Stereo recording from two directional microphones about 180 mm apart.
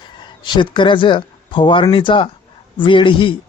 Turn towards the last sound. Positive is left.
turn(degrees=30)  # may be behind; listen again after turning